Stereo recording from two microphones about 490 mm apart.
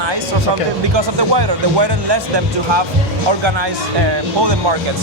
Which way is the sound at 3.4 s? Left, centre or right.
Right.